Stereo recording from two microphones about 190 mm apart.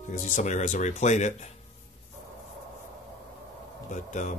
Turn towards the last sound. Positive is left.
turn(degrees=40)  # may be behind; listen again after turning